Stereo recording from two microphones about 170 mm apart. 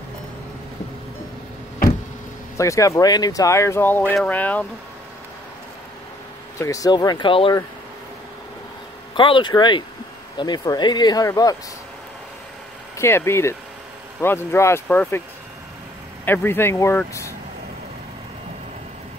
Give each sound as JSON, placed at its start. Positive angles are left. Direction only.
{"t": 2.5, "sound": "speech", "side_deg": 20}
{"t": 6.6, "sound": "speech", "side_deg": 20}
{"t": 9.1, "sound": "speech", "side_deg": 30}
{"t": 12.9, "sound": "speech", "side_deg": 15}
{"t": 16.3, "sound": "speech", "side_deg": 15}